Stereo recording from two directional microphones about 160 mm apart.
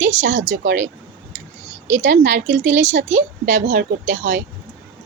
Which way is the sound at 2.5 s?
50° right (ahead or behind).